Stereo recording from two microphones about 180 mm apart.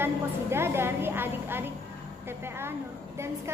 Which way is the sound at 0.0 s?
15° right (ahead or behind).